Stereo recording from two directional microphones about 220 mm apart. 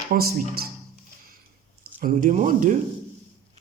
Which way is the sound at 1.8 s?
40° right (ahead or behind).